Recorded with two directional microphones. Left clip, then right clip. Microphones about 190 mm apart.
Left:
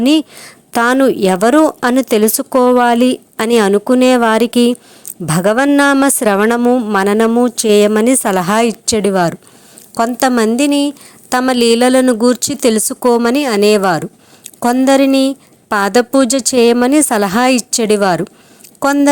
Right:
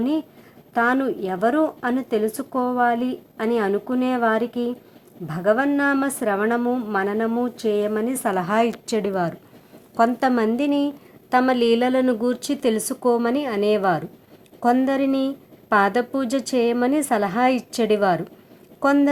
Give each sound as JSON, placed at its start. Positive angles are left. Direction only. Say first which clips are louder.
{"t": 0.0, "sound": "a woman's voice", "louder": "left 12 dB", "side_deg": 50}